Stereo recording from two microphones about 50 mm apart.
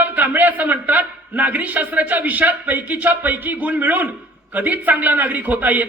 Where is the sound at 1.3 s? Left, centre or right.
Right.